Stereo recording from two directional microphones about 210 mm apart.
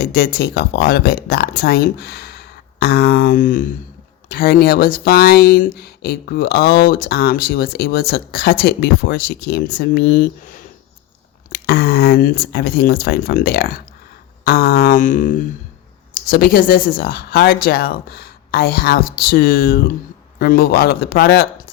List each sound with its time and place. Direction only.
0.0 s speech: 50° left (ahead or behind)